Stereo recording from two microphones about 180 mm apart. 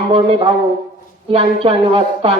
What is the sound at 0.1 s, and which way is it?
A man's voice, 30° right (ahead or behind).